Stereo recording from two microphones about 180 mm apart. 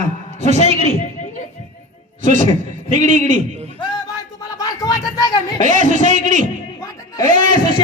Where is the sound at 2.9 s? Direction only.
45° right (ahead or behind).